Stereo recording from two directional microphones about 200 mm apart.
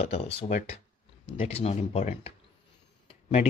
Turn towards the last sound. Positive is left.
turn(degrees=30)  # may be behind; listen again after turning